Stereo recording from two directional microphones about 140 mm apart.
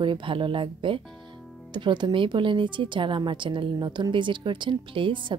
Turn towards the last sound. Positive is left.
turn(degrees=-35)  # may be behind; listen again after turning